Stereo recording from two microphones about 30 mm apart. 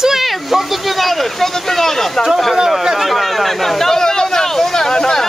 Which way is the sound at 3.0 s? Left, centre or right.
Centre.